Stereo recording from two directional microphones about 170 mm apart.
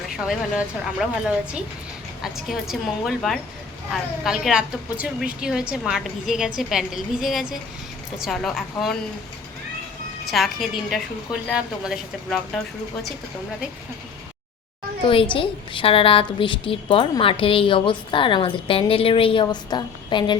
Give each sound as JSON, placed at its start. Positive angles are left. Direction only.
{"t": 0.2, "sound": "a woman's voice", "side_deg": -5}
{"t": 10.3, "sound": "a woman's voice", "side_deg": 0}
{"t": 15.0, "sound": "a woman's voice", "side_deg": 30}